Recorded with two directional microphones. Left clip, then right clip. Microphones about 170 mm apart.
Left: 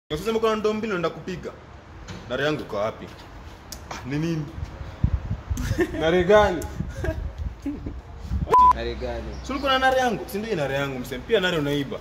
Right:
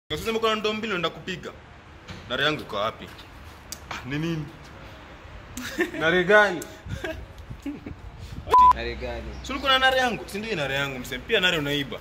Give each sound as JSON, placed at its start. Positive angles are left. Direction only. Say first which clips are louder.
{"t": 0.1, "sound": "a man's voice", "louder": "left 2 dB", "side_deg": 20}
{"t": 5.5, "sound": "speech", "louder": "left 2 dB", "side_deg": 20}
{"t": 6.6, "sound": "speech", "louder": "left 2 dB", "side_deg": 20}
{"t": 7.7, "sound": "speech", "louder": "left 3 dB", "side_deg": 10}
{"t": 9.4, "sound": "a man's voice", "louder": "right 1 dB", "side_deg": 25}